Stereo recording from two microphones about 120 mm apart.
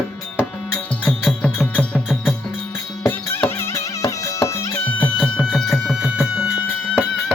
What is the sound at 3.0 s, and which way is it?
Music, 20° left (ahead or behind).